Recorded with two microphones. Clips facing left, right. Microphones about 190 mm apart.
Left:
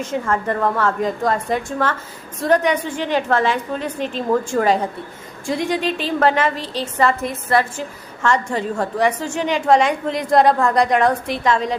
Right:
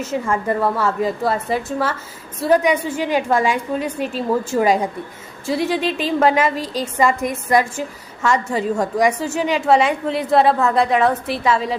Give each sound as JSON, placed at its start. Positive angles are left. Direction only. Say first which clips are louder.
{"t": 0.0, "sound": "a woman's voice", "louder": "even", "side_deg": -10}